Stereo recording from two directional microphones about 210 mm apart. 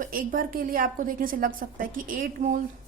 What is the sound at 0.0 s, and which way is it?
A woman's voice, 40° right (ahead or behind).